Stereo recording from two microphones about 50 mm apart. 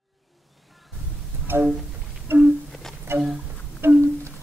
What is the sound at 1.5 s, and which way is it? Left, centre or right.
Music, right.